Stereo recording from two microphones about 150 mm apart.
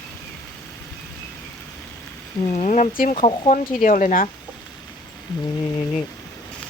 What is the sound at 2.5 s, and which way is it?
Speech, 50° left (ahead or behind).